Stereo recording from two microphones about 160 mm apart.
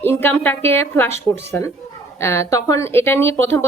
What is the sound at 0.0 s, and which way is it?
A woman's voice, 15° left (ahead or behind).